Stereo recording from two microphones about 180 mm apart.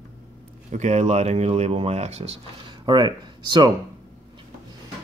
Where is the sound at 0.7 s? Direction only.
40° right (ahead or behind).